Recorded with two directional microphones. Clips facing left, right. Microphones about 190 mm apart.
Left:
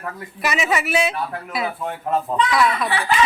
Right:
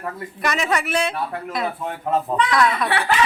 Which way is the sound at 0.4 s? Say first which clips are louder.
Left 1 dB; 5° left (ahead or behind).